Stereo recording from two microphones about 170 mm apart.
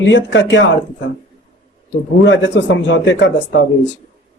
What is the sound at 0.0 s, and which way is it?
Speech, 90° left.